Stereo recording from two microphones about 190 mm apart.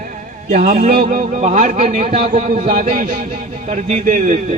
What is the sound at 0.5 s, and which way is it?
A man's voice, 45° right (ahead or behind).